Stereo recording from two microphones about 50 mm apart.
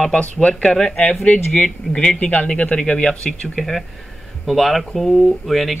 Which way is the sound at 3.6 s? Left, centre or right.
Centre.